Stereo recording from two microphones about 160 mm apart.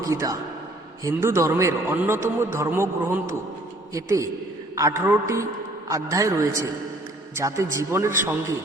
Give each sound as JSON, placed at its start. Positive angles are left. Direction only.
{"t": 0.0, "sound": "a man's voice", "side_deg": -20}